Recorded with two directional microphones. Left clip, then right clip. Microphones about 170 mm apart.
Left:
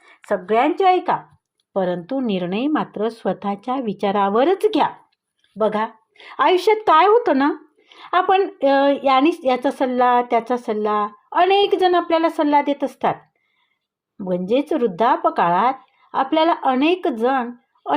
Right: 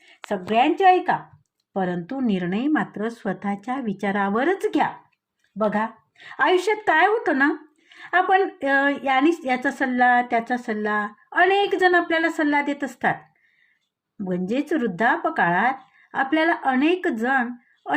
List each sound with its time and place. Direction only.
0.3 s speech: 35° left (ahead or behind)
14.2 s speech: 30° left (ahead or behind)